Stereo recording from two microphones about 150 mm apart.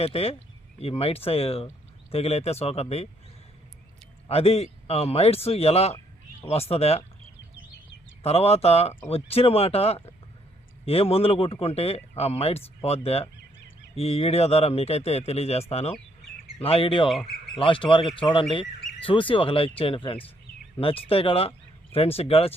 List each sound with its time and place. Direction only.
0.0 s speech: 40° left (ahead or behind)
4.3 s speech: 40° left (ahead or behind)
8.2 s speech: 45° left (ahead or behind)
17.1 s speech: centre (ahead or behind)
17.6 s speech: 35° left (ahead or behind)